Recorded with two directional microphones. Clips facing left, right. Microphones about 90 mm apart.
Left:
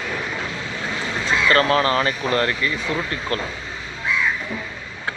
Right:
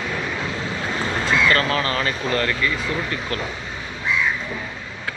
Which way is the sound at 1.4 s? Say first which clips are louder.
Left 3 dB; 35° left (ahead or behind).